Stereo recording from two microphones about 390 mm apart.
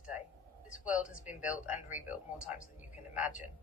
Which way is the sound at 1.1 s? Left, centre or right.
Centre.